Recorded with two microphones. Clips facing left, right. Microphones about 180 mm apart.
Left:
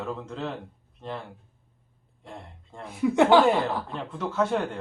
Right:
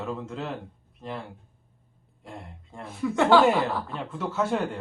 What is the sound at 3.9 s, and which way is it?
Speech, 5° right (ahead or behind).